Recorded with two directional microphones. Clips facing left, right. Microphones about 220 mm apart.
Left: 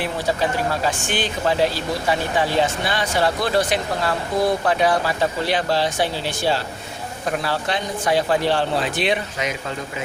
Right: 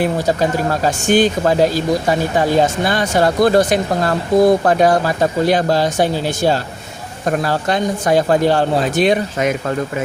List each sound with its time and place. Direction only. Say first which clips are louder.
0.0 s speech: right 6 dB; 45° right (ahead or behind)